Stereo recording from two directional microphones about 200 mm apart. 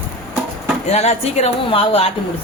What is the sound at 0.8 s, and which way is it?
Speech, 30° left (ahead or behind).